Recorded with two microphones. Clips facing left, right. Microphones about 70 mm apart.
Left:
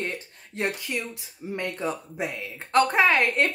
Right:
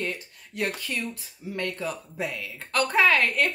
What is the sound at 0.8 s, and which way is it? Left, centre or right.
Speech, centre.